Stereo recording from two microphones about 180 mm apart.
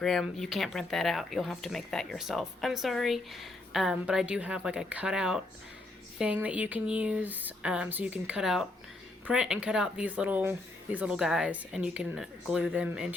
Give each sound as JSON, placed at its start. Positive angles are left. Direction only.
{"t": 0.0, "sound": "speech", "side_deg": 0}